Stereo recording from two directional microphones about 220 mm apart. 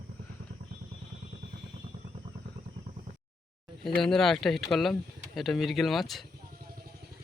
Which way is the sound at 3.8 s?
Centre (ahead or behind).